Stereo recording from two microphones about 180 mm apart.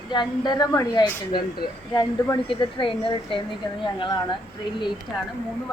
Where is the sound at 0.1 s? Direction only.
25° left (ahead or behind).